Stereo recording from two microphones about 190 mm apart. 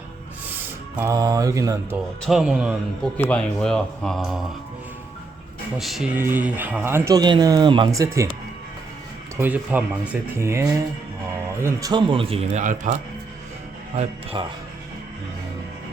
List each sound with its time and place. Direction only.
0.9 s speech: 15° right (ahead or behind)
2.2 s speech: centre (ahead or behind)
3.2 s speech: 5° left (ahead or behind)
5.7 s speech: centre (ahead or behind)
9.4 s a man's voice: 10° right (ahead or behind); by 14.4 s 35° right (ahead or behind)